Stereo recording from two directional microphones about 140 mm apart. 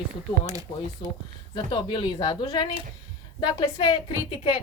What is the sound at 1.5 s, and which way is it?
A woman's voice, 35° left (ahead or behind).